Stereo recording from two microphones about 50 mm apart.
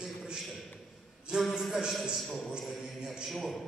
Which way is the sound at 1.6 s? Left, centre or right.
Centre.